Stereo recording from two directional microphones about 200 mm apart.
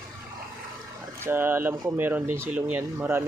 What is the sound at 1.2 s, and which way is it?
Speech, 10° right (ahead or behind).